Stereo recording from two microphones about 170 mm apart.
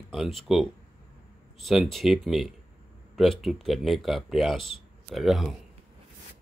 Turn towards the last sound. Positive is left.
turn(degrees=0)  # may be behind; listen again after turning